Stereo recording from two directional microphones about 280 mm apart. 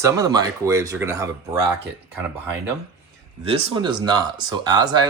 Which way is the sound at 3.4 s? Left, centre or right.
Centre.